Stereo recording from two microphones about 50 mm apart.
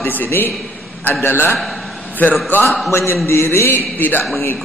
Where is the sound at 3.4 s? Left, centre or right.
Left.